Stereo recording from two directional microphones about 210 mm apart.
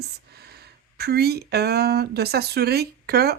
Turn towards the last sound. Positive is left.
turn(degrees=-50)  # may be behind; listen again after turning